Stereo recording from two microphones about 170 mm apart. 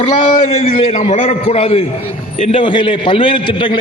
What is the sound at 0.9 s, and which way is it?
A man's voice, 45° left (ahead or behind).